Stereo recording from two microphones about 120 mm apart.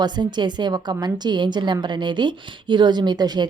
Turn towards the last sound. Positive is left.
turn(degrees=-35)  # may be behind; listen again after turning